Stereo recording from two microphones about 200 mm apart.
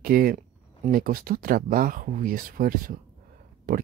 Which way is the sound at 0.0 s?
45° right (ahead or behind).